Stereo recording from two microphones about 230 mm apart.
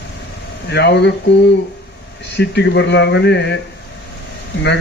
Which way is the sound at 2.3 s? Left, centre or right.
Left.